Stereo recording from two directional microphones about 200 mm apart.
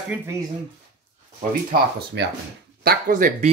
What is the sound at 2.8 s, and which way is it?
Speech, 45° right (ahead or behind).